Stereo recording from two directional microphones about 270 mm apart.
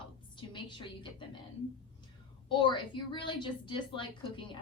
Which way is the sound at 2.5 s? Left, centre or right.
Centre.